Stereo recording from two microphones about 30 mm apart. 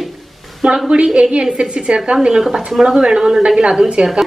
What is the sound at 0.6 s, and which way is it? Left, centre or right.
A woman's voice, right.